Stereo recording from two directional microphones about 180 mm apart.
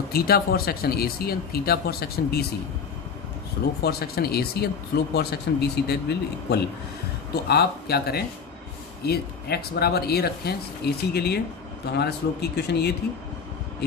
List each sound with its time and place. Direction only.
0.1 s speech: 60° left (ahead or behind)
3.8 s speech: 60° left (ahead or behind)